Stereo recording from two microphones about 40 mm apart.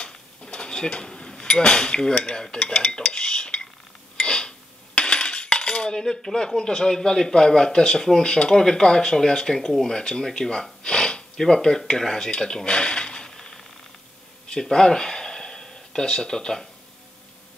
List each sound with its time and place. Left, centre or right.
0.0 s speech: left
4.2 s cutlery: left
11.9 s speech: centre
12.3 s a sound: centre